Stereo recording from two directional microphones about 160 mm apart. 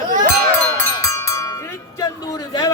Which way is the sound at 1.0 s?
20° left (ahead or behind).